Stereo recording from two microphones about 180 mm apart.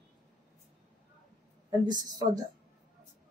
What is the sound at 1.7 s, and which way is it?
Speech, 20° right (ahead or behind).